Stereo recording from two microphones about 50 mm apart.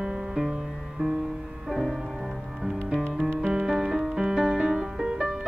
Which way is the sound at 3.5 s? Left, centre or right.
Centre.